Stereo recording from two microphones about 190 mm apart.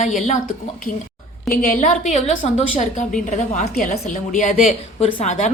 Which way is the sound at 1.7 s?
40° left (ahead or behind).